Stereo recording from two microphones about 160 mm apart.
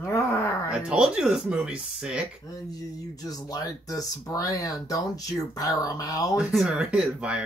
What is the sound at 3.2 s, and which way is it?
Speech, 25° left (ahead or behind).